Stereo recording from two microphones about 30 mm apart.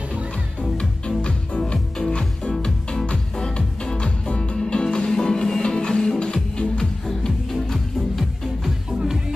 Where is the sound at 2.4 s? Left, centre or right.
Left.